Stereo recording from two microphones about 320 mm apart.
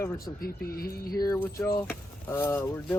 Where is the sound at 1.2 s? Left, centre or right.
Centre.